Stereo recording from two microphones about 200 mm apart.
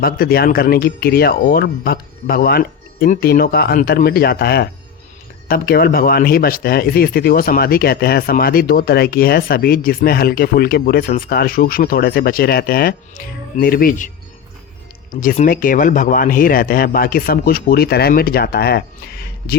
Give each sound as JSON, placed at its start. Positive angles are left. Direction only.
{"t": 0.0, "sound": "speech", "side_deg": 50}
{"t": 15.1, "sound": "speech", "side_deg": 40}